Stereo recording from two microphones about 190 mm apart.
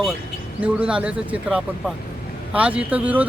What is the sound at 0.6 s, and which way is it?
Speech, 5° right (ahead or behind).